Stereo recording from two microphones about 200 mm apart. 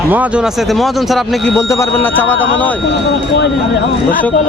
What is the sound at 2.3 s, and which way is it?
Speech, 70° left (ahead or behind).